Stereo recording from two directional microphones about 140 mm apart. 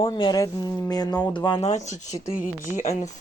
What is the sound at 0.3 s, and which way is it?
Speech, 25° left (ahead or behind).